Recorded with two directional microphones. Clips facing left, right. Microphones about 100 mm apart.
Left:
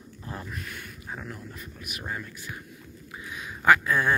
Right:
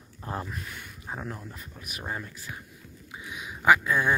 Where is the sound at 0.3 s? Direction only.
35° right (ahead or behind).